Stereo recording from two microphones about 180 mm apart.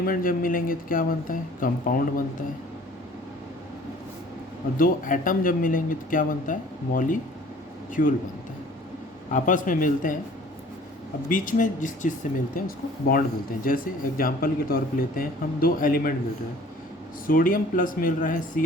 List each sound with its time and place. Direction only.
0.0 s speech: 50° left (ahead or behind)
4.8 s speech: 50° left (ahead or behind)
9.3 s speech: 45° left (ahead or behind)
11.3 s speech: 50° left (ahead or behind)
17.2 s speech: 50° left (ahead or behind)